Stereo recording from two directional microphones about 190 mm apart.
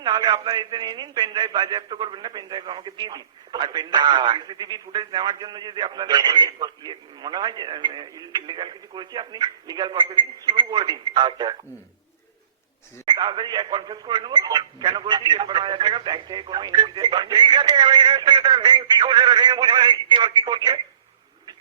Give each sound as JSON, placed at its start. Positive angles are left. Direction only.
{"t": 0.0, "sound": "a man's voice", "side_deg": -25}
{"t": 13.1, "sound": "a man's voice", "side_deg": -25}